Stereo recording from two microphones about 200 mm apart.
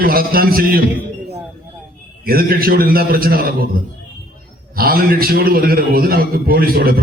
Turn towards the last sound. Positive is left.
turn(degrees=-50)  # may be behind; listen again after turning